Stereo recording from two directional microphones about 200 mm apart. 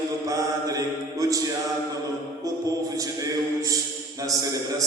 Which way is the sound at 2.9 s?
15° right (ahead or behind).